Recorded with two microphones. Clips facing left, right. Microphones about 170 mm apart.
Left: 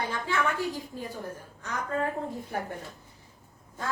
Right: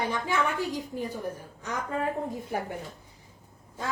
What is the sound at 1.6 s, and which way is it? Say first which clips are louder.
Speech: even; 15° right (ahead or behind).